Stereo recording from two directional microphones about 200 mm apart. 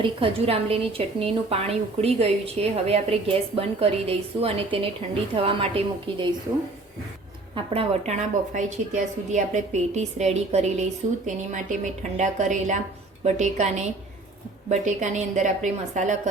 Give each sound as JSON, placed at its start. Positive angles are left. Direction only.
{"t": 0.0, "sound": "a woman's voice", "side_deg": -25}
{"t": 7.5, "sound": "a woman's voice", "side_deg": -30}